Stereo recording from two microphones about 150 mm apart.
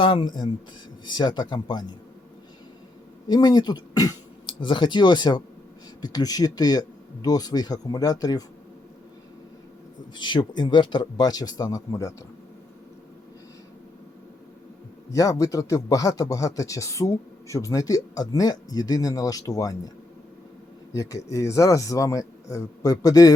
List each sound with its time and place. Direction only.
0.0 s speech: 35° left (ahead or behind)
3.2 s speech: 25° left (ahead or behind)
10.2 s speech: 30° left (ahead or behind)
15.1 s speech: 20° left (ahead or behind)
20.9 s speech: 20° left (ahead or behind)